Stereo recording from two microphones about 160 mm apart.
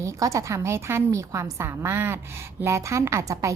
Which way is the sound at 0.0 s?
20° right (ahead or behind).